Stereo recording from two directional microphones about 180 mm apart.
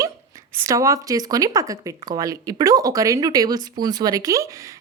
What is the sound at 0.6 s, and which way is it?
Speech, 20° right (ahead or behind).